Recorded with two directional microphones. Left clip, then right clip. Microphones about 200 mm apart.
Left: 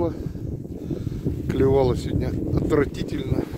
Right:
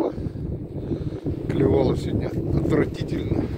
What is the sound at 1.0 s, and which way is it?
Boat, 15° left (ahead or behind).